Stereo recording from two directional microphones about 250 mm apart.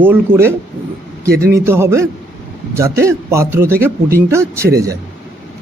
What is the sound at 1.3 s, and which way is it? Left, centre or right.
Speech, right.